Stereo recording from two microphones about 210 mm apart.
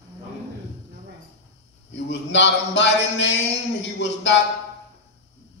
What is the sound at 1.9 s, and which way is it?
A man's voice, 60° left (ahead or behind).